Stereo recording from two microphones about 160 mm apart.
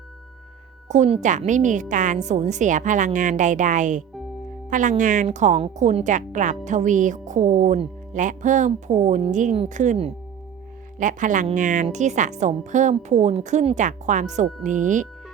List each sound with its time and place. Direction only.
0.9 s a woman's voice: 45° right (ahead or behind)